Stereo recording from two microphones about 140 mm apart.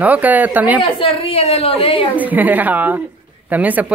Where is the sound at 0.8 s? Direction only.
40° left (ahead or behind).